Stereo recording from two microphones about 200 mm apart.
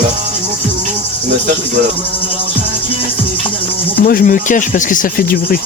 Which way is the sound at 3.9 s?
45° left (ahead or behind).